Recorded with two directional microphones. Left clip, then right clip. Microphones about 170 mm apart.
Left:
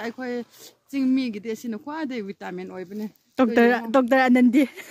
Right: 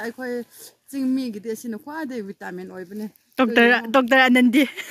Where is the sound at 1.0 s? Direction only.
10° left (ahead or behind).